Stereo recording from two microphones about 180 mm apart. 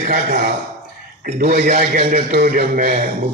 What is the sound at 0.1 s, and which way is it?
A man's voice, 55° right (ahead or behind).